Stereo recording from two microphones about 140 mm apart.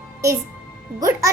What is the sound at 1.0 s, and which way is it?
Speech, 25° right (ahead or behind).